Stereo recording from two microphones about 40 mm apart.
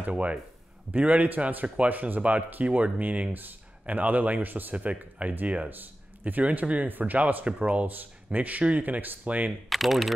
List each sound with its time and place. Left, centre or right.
0.0 s speech: right
4.7 s speech: right
9.7 s speech: centre